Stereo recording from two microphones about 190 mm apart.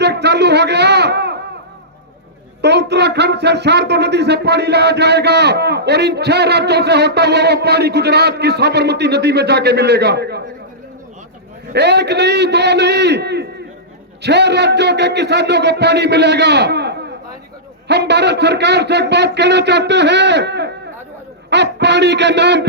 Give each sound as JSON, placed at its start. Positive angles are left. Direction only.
{"t": 0.0, "sound": "a sound", "side_deg": -60}
{"t": 2.6, "sound": "speech", "side_deg": -60}
{"t": 11.7, "sound": "speech", "side_deg": -60}